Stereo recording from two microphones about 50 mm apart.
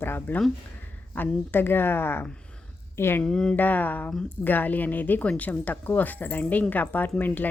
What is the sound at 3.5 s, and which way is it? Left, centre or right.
Speech, left.